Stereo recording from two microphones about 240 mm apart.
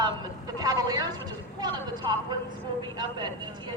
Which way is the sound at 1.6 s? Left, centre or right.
Centre.